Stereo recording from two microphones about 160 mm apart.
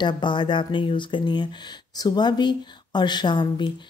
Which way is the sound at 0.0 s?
30° left (ahead or behind).